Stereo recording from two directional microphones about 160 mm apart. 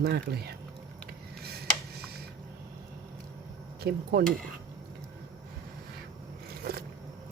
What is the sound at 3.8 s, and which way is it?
Speech, 75° right (ahead or behind).